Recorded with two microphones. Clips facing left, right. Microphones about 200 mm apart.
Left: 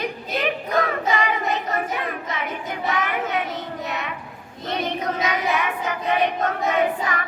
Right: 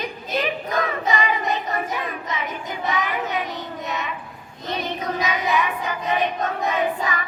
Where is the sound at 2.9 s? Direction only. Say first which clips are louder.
Left 1 dB; 65° left (ahead or behind).